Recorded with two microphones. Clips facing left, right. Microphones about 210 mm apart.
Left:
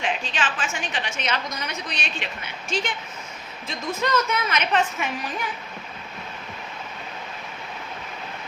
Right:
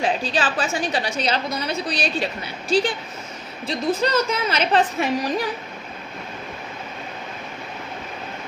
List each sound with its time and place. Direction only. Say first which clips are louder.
0.0 s a woman's voice: right 5 dB; 35° right (ahead or behind)